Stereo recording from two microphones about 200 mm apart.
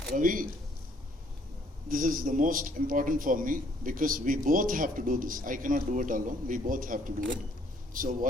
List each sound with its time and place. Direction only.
0.1 s a man's voice: 45° right (ahead or behind)
1.9 s a man's voice: 45° right (ahead or behind)